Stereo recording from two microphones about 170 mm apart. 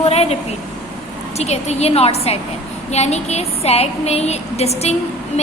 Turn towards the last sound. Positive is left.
turn(degrees=40)  # may be behind; listen again after turning